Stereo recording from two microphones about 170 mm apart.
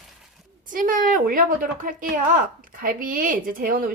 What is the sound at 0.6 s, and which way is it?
A woman's voice, 55° right (ahead or behind).